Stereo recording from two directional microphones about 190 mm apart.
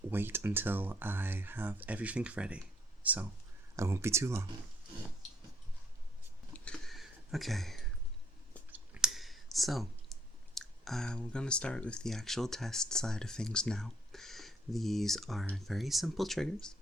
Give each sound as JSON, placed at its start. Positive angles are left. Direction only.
{"t": 0.1, "sound": "speech", "side_deg": -10}
{"t": 6.5, "sound": "a sound", "side_deg": 5}
{"t": 8.7, "sound": "speech", "side_deg": -5}